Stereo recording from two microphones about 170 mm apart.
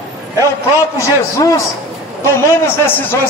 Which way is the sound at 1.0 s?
20° left (ahead or behind).